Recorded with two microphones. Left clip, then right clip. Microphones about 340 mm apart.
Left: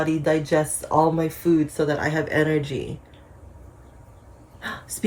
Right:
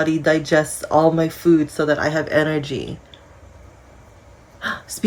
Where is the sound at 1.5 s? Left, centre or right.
Centre.